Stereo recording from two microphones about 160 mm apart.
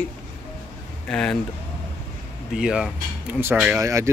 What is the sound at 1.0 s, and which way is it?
Speech, 5° left (ahead or behind).